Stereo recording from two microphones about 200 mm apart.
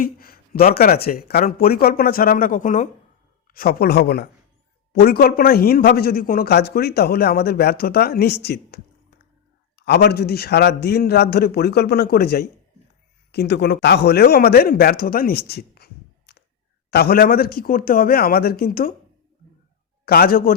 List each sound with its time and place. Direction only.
0.0 s a man's voice: 45° left (ahead or behind)
20.1 s speech: 50° left (ahead or behind)